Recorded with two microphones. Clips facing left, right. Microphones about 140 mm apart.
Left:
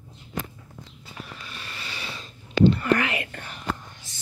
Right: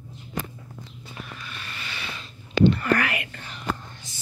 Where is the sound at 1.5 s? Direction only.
30° left (ahead or behind).